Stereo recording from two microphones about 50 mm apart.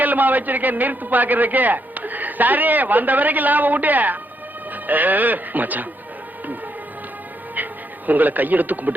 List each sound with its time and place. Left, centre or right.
0.0 s a man's voice: right
7.5 s music: right